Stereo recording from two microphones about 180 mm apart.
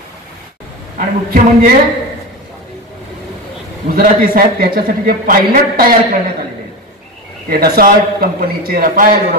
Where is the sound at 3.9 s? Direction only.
55° right (ahead or behind).